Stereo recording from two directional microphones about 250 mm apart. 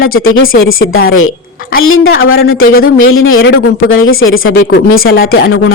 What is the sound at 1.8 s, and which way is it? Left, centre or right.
Speech, left.